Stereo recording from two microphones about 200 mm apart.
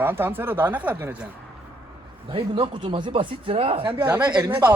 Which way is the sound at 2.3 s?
25° right (ahead or behind).